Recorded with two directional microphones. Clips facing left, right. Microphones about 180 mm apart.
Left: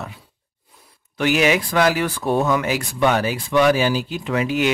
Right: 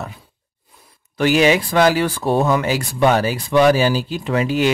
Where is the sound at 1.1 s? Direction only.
35° right (ahead or behind).